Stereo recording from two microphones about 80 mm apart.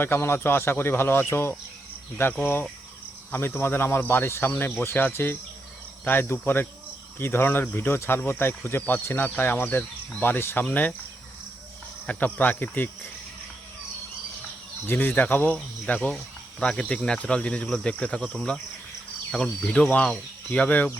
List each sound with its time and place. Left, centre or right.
0.0 s speech: left
12.0 s speech: left
14.8 s speech: left